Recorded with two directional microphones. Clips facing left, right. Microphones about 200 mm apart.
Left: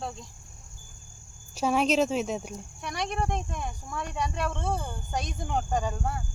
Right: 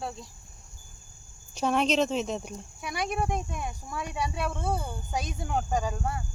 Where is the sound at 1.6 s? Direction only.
5° left (ahead or behind).